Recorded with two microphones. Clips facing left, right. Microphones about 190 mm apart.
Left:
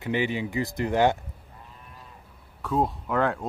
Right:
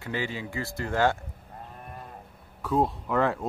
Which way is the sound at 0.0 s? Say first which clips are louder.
Left 5 dB; 20° left (ahead or behind).